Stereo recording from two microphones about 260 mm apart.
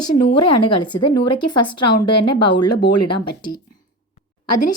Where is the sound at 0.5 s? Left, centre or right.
Left.